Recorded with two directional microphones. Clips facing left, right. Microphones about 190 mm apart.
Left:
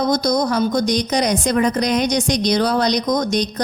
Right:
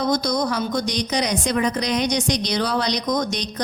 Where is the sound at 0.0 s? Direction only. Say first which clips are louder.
Left 4 dB; 40° left (ahead or behind).